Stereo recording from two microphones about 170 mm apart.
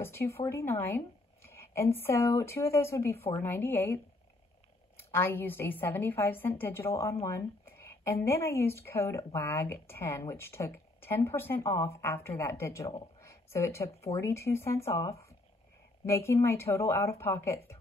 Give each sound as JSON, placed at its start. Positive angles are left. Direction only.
{"t": 0.0, "sound": "a woman's voice", "side_deg": 15}